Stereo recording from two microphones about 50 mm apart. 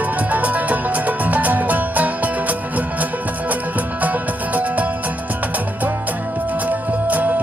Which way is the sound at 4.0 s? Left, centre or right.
Right.